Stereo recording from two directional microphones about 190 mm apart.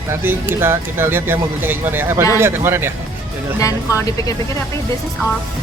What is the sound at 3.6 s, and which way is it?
Speech, 15° left (ahead or behind).